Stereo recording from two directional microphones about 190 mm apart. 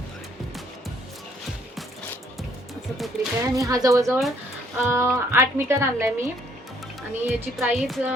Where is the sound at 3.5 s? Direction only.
20° right (ahead or behind).